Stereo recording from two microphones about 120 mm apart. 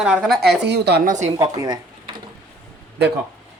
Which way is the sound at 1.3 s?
35° right (ahead or behind).